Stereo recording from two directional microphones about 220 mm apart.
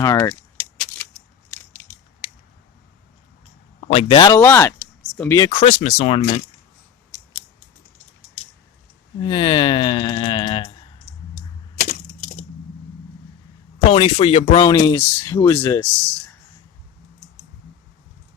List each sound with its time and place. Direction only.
0.0 s speech: 10° left (ahead or behind)
3.9 s speech: 25° left (ahead or behind)
4.4 s speech: 10° left (ahead or behind)
5.5 s speech: 30° left (ahead or behind)
9.2 s speech: 25° left (ahead or behind)
11.8 s crack: 35° left (ahead or behind)
13.9 s speech: 25° left (ahead or behind); by 15.9 s 10° left (ahead or behind)